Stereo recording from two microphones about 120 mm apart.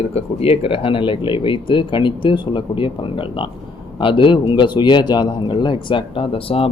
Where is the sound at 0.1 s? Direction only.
60° left (ahead or behind).